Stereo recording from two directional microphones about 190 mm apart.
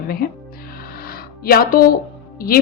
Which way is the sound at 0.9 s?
50° left (ahead or behind).